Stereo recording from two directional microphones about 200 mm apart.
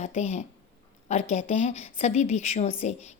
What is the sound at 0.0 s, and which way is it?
A woman's voice, 35° left (ahead or behind).